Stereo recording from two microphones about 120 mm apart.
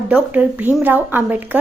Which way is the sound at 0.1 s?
10° right (ahead or behind).